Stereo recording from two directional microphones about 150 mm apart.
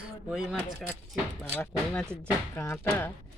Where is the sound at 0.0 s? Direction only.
5° right (ahead or behind).